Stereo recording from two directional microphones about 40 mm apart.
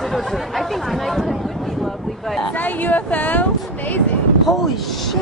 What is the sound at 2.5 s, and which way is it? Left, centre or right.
Speech, left.